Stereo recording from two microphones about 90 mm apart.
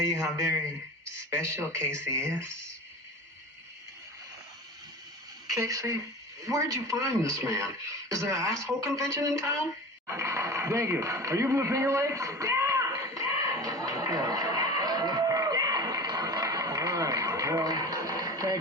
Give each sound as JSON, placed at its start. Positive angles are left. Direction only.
{"t": 0.1, "sound": "a man's voice", "side_deg": -35}
{"t": 5.5, "sound": "a woman's voice", "side_deg": -35}
{"t": 13.3, "sound": "music", "side_deg": -40}